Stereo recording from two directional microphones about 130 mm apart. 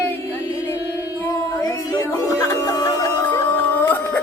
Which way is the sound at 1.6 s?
30° left (ahead or behind).